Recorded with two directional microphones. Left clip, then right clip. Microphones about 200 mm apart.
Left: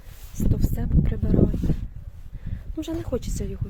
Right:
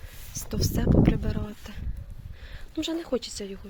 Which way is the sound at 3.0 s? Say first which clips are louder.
Even; 25° left (ahead or behind).